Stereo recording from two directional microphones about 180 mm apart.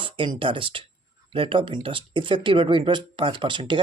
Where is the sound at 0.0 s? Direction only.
25° right (ahead or behind).